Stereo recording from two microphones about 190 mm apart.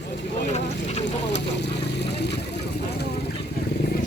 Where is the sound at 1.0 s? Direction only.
65° left (ahead or behind).